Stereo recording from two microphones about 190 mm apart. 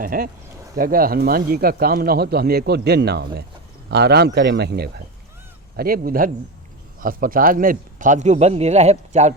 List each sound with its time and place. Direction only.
0.0 s a man's voice: 50° right (ahead or behind)